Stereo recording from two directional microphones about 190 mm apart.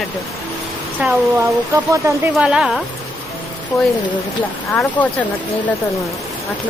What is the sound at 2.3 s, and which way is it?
A woman's voice, 5° right (ahead or behind).